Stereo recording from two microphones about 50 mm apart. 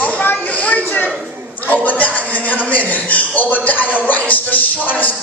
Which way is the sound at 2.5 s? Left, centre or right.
Left.